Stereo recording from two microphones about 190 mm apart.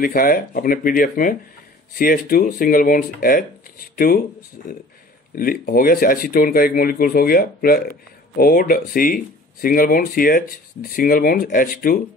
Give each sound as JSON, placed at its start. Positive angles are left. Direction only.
{"t": 0.0, "sound": "speech", "side_deg": 50}
{"t": 5.3, "sound": "speech", "side_deg": 50}